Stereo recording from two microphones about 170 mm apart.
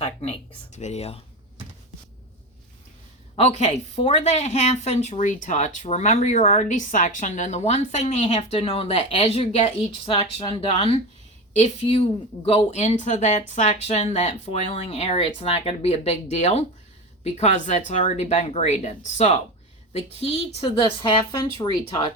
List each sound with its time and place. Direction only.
0.0 s a woman's voice: 35° left (ahead or behind)
3.3 s a woman's voice: 40° left (ahead or behind)